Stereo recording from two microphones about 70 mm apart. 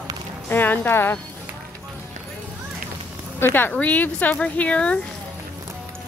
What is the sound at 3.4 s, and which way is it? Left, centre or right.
Speech, left.